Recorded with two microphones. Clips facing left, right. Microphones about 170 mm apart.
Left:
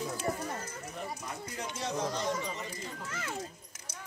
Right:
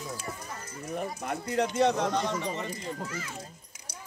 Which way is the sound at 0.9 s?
65° right (ahead or behind).